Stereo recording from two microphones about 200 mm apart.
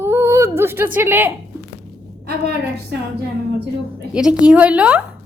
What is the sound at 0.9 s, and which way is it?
Speech, 10° right (ahead or behind).